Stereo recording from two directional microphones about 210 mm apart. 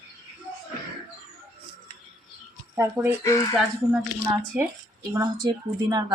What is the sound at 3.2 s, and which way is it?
Speech, 15° left (ahead or behind).